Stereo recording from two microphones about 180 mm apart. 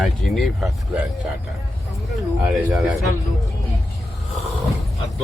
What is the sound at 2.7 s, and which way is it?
Speech, centre (ahead or behind).